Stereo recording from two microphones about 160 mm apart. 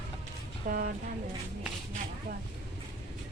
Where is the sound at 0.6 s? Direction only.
60° right (ahead or behind).